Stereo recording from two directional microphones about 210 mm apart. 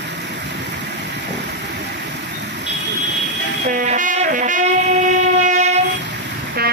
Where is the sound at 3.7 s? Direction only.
40° right (ahead or behind).